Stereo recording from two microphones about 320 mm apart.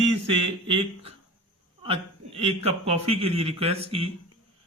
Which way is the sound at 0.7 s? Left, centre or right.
Centre.